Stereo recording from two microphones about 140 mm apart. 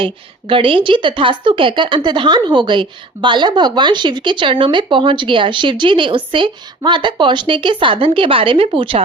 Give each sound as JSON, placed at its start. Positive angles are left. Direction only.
{"t": 0.0, "sound": "a woman's voice", "side_deg": -40}